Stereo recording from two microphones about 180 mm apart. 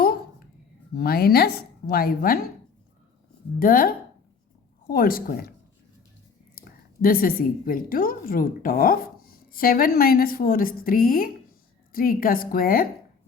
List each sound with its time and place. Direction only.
0.9 s speech: 60° left (ahead or behind)
3.6 s a woman's voice: 55° left (ahead or behind)
6.6 s a woman's voice: 55° left (ahead or behind)